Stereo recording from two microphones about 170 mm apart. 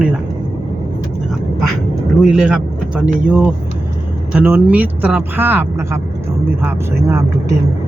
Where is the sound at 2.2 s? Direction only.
5° right (ahead or behind).